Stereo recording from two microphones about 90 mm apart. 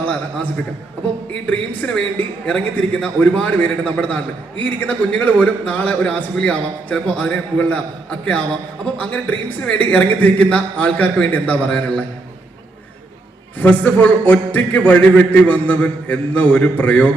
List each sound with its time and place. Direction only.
0.0 s a man's voice: 15° left (ahead or behind)
13.6 s a man's voice: 15° left (ahead or behind)